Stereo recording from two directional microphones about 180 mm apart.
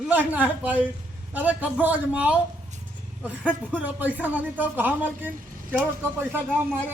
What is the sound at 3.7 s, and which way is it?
Speech, 10° right (ahead or behind).